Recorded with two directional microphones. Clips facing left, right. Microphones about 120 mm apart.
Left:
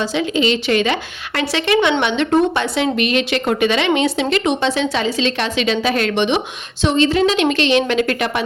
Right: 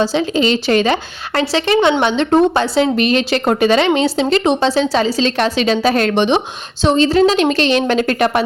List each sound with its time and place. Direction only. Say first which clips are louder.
0.0 s a woman's voice: right 3 dB; 35° right (ahead or behind)